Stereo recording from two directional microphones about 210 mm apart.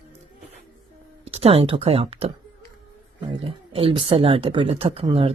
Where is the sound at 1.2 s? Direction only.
30° right (ahead or behind).